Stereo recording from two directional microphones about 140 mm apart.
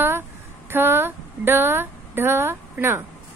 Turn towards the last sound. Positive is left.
turn(degrees=-15)  # may be behind; listen again after turning